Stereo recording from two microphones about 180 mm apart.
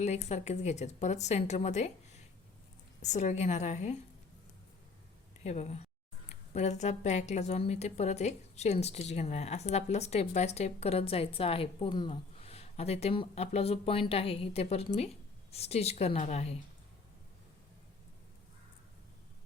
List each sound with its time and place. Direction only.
0.0 s a woman's voice: 40° left (ahead or behind)
5.4 s a woman's voice: 40° left (ahead or behind)